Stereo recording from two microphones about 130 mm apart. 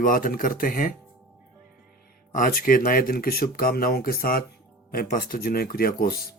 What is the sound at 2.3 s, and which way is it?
Speech, 90° left.